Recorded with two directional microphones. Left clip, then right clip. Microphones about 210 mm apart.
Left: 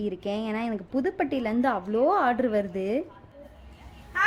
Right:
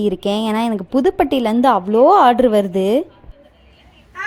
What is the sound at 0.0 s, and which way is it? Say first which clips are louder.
A woman's voice: right 12 dB; 30° right (ahead or behind).